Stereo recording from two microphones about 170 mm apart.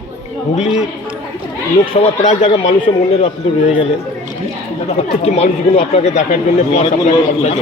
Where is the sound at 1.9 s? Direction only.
40° left (ahead or behind).